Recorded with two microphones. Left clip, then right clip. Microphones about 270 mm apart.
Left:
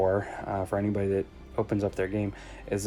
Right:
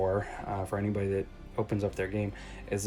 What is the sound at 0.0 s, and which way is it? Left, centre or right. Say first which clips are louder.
Speech: left 4 dB; left.